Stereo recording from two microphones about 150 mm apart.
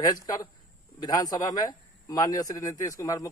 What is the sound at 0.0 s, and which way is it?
Speech, 25° left (ahead or behind).